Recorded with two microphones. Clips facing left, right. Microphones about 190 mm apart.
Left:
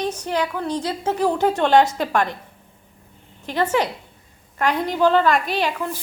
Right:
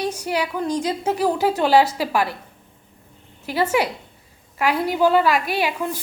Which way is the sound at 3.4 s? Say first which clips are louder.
Even; 10° right (ahead or behind).